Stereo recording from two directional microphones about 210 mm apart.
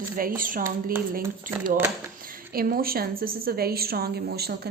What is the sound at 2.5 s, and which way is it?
A woman's voice, 45° right (ahead or behind).